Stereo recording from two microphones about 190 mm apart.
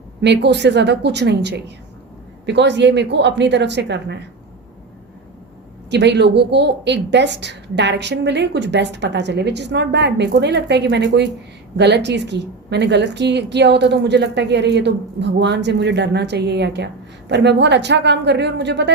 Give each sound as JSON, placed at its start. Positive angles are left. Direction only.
{"t": 0.2, "sound": "a woman's voice", "side_deg": -65}
{"t": 5.9, "sound": "a woman's voice", "side_deg": -65}